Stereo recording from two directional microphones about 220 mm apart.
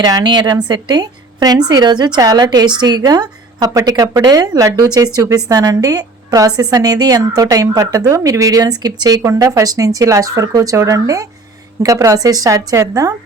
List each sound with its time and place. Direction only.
0.0 s a woman's voice: 20° right (ahead or behind)